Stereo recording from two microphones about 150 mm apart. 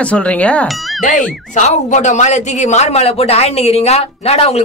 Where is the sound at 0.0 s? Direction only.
10° left (ahead or behind).